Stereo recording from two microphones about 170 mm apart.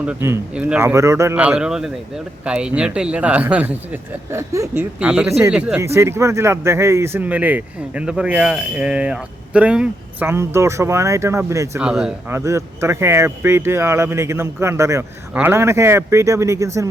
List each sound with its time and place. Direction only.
0.0 s speech: 10° right (ahead or behind)
5.8 s speech: 15° right (ahead or behind)
11.8 s speech: 5° right (ahead or behind)
12.3 s speech: 15° right (ahead or behind)